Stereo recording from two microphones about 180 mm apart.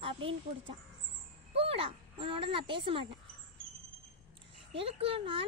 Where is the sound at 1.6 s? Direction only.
30° right (ahead or behind).